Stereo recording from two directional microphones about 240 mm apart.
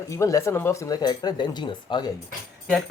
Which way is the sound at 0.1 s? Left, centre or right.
Centre.